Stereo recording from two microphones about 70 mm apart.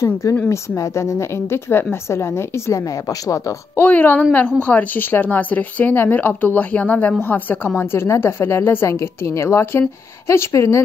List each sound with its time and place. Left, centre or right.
0.0 s a woman's voice: left
3.7 s a woman's voice: left